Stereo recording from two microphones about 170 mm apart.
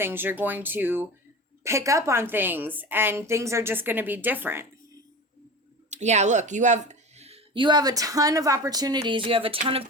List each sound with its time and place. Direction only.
0.0 s a woman's voice: 10° right (ahead or behind)
5.9 s speech: 40° right (ahead or behind)